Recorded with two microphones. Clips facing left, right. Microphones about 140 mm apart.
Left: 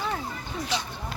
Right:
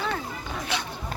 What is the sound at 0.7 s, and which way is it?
Speech, 60° right (ahead or behind).